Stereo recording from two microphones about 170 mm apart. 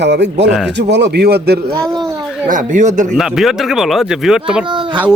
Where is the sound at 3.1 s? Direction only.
Centre (ahead or behind).